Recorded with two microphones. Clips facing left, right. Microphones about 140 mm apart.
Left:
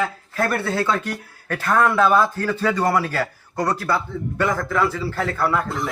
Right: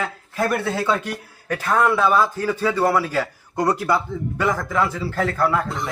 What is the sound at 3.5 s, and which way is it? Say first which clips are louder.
Speech: right 2 dB; 20° right (ahead or behind).